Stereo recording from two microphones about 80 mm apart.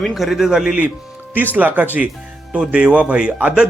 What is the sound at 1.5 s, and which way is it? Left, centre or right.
A man's voice, centre.